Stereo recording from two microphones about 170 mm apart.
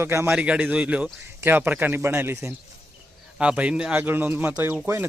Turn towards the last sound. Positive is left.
turn(degrees=-15)  # may be behind; listen again after turning